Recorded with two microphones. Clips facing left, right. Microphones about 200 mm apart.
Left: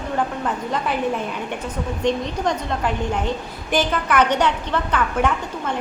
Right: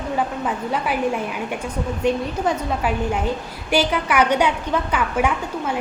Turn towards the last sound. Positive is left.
turn(degrees=-10)  # may be behind; listen again after turning